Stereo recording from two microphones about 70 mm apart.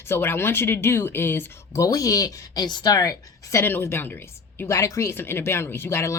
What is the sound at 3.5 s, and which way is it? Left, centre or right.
Speech, left.